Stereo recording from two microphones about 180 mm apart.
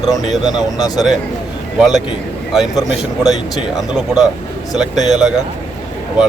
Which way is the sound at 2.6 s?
20° left (ahead or behind).